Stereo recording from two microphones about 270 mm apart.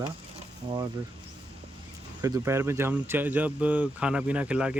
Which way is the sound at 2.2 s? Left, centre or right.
Centre.